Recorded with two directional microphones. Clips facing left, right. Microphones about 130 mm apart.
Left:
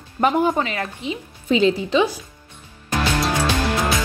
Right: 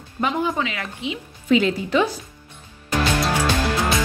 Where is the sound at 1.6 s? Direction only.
20° left (ahead or behind).